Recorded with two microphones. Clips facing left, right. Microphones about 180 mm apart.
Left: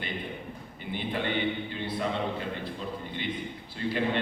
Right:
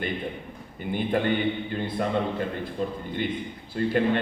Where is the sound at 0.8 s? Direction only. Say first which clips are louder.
Right 8 dB; 50° right (ahead or behind).